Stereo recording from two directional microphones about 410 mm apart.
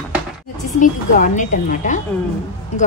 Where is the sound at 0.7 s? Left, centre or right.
Centre.